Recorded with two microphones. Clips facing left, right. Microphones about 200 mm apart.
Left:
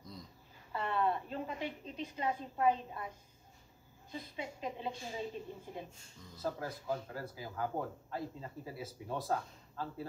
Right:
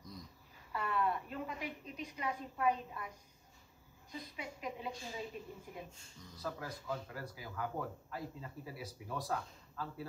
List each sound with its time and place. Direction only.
0.7 s speech: 30° left (ahead or behind)
4.1 s speech: 30° left (ahead or behind)